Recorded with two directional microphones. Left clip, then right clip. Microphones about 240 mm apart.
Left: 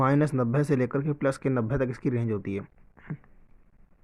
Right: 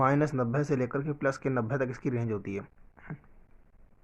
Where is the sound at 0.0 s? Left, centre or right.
Left.